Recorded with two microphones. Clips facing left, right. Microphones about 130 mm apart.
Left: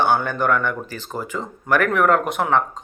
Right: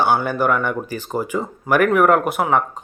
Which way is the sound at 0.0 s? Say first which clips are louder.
Right 2 dB; 10° right (ahead or behind).